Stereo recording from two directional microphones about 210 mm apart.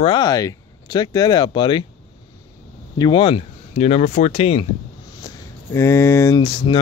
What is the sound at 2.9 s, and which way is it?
Speech, 20° left (ahead or behind).